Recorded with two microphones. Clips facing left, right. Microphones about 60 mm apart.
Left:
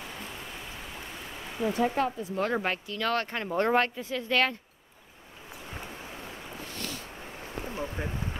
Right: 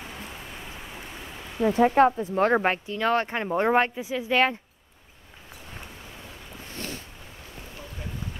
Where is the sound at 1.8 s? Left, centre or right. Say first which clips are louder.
Right 10 dB; right.